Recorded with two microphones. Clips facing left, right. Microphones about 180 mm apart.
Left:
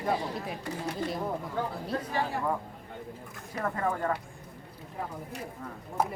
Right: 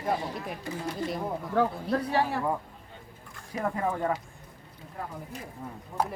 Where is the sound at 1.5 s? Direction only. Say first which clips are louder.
Right 6 dB; 65° right (ahead or behind).